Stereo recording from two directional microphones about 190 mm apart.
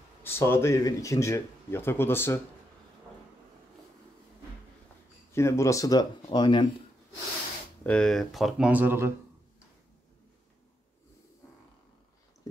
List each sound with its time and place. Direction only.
0.2 s speech: 10° left (ahead or behind)
5.3 s speech: 15° left (ahead or behind)
7.8 s speech: 5° left (ahead or behind); by 9.1 s 10° right (ahead or behind)